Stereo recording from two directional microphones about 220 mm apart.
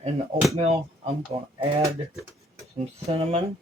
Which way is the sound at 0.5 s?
25° right (ahead or behind).